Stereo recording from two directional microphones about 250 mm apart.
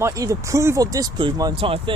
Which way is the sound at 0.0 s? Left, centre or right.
Centre.